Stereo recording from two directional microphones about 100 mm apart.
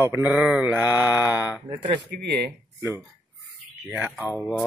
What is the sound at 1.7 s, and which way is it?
Speech, 50° right (ahead or behind).